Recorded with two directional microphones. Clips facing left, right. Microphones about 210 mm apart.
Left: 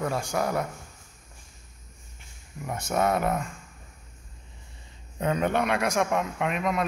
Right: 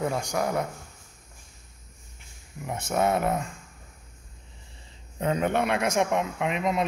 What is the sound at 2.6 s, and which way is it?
Speech, 25° right (ahead or behind).